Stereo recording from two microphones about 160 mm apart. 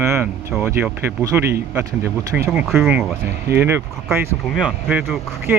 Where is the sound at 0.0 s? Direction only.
15° right (ahead or behind).